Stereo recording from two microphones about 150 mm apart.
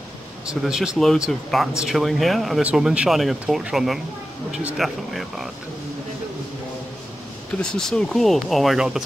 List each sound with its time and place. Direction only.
0.5 s speech: 5° right (ahead or behind)
7.6 s speech: 5° left (ahead or behind)